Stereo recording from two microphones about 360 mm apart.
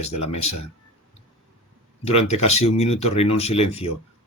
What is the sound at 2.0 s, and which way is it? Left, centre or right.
Speech, centre.